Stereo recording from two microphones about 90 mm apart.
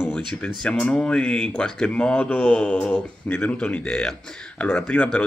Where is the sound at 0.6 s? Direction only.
10° left (ahead or behind).